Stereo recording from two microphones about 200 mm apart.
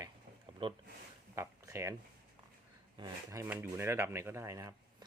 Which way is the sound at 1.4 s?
15° right (ahead or behind).